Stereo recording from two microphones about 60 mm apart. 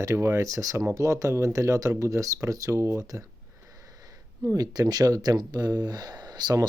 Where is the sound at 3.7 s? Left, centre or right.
Right.